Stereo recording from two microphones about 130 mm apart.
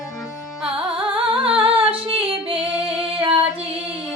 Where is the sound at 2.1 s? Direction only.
45° right (ahead or behind).